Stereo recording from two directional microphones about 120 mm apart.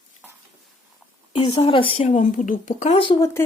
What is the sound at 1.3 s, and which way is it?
Speech, 40° left (ahead or behind).